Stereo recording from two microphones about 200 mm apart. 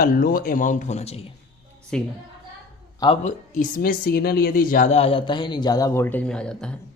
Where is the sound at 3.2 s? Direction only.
45° left (ahead or behind); by 6.5 s 5° left (ahead or behind).